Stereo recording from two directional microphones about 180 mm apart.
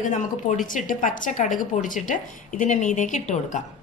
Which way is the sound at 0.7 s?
45° left (ahead or behind).